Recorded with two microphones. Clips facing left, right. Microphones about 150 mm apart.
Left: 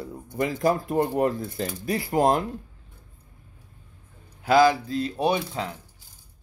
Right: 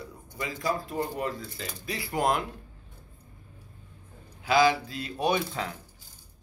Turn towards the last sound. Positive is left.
turn(degrees=30)  # may be behind; listen again after turning